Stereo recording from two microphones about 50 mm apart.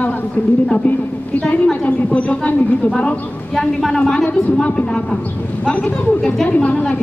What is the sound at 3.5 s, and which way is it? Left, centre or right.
Speech, centre.